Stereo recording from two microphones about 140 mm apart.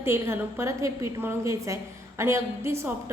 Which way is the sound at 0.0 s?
20° right (ahead or behind).